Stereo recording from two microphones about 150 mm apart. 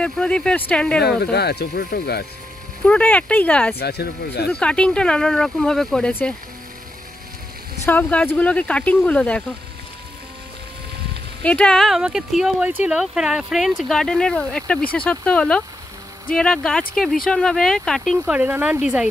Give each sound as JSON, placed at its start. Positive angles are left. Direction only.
{"t": 0.0, "sound": "speech", "side_deg": 5}
{"t": 1.2, "sound": "speech", "side_deg": 90}
{"t": 2.8, "sound": "speech", "side_deg": 10}
{"t": 3.7, "sound": "speech", "side_deg": 90}
{"t": 4.5, "sound": "speech", "side_deg": 5}
{"t": 7.8, "sound": "speech", "side_deg": 15}
{"t": 11.4, "sound": "speech", "side_deg": 5}
{"t": 18.3, "sound": "speech", "side_deg": -10}